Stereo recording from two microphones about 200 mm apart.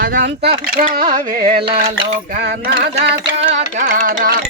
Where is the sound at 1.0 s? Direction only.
25° right (ahead or behind).